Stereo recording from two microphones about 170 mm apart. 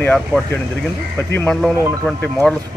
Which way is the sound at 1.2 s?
10° left (ahead or behind).